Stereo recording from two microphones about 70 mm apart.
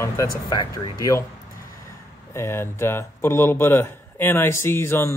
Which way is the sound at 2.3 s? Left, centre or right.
Left.